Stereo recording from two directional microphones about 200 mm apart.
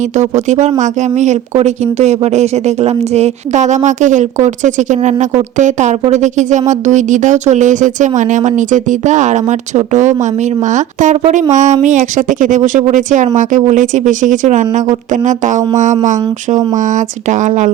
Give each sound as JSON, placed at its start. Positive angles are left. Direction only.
{"t": 0.2, "sound": "speech", "side_deg": -35}